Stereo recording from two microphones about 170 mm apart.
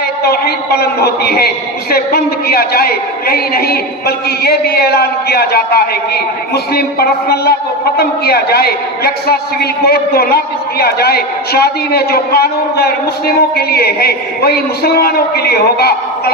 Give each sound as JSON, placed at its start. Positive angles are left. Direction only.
{"t": 0.3, "sound": "a man's voice", "side_deg": 65}
{"t": 7.9, "sound": "a man's voice", "side_deg": 65}